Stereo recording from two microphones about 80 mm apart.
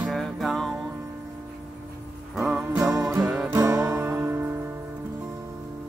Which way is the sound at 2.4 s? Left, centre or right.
Centre.